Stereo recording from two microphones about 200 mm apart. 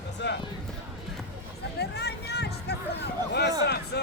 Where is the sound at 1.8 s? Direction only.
55° left (ahead or behind).